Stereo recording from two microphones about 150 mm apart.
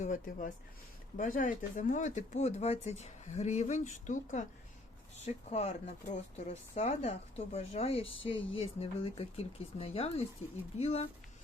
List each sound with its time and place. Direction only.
0.0 s speech: 55° left (ahead or behind)